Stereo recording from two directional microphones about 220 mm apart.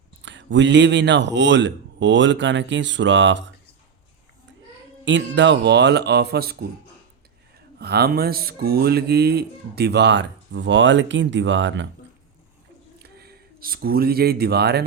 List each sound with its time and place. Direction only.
0.2 s speech: 55° right (ahead or behind)
5.0 s speech: 55° right (ahead or behind)
7.8 s speech: 45° right (ahead or behind)
13.0 s speech: 45° right (ahead or behind)